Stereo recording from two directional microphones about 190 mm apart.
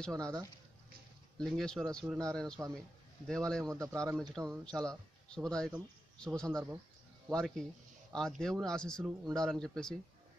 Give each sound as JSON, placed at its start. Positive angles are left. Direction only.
{"t": 0.0, "sound": "speech", "side_deg": 5}
{"t": 1.4, "sound": "speech", "side_deg": 0}